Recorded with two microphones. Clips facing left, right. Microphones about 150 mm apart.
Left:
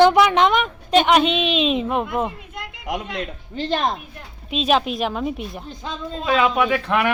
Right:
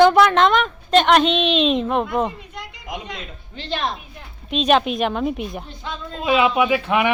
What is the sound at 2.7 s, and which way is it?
Speech, 75° left (ahead or behind).